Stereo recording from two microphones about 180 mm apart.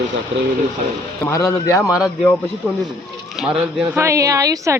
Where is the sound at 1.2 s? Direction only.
15° left (ahead or behind).